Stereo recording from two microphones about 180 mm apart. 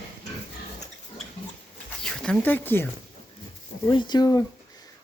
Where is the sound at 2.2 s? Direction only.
5° left (ahead or behind).